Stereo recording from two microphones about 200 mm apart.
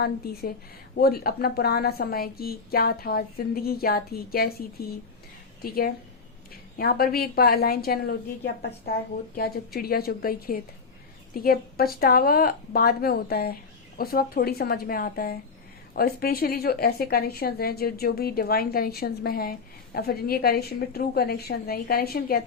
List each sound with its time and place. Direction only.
0.2 s a woman's voice: 50° left (ahead or behind)